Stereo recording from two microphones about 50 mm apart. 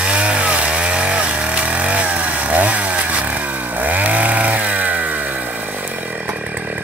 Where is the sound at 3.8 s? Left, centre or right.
Right.